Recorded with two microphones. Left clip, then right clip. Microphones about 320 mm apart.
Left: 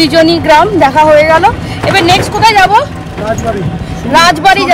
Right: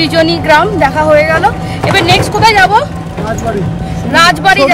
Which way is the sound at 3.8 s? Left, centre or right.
Centre.